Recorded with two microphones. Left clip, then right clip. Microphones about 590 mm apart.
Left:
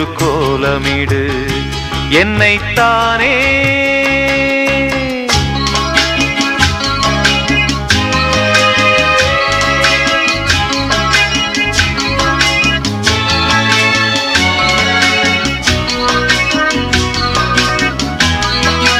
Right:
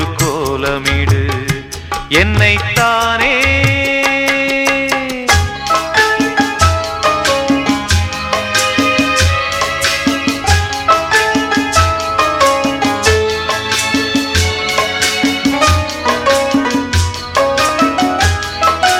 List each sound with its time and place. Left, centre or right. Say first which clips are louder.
2.1 s music: left 1 dB; right
8.5 s music: left 3 dB; left
9.8 s music: left 4 dB; left
13.5 s music: left 5 dB; right
18.6 s music: right 3 dB; left